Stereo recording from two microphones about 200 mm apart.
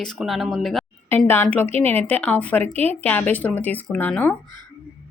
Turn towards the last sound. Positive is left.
turn(degrees=5)  # may be behind; listen again after turning